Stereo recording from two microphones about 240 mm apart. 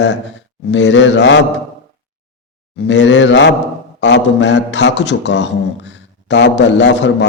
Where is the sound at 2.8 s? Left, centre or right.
Left.